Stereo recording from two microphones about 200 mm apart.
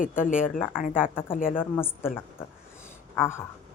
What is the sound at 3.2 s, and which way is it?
Speech, 10° left (ahead or behind).